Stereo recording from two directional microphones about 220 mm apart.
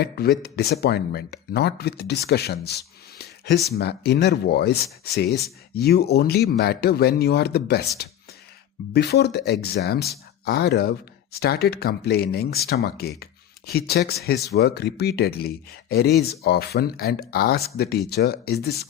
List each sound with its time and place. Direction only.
0.0 s speech: 45° left (ahead or behind)
8.9 s speech: 50° left (ahead or behind)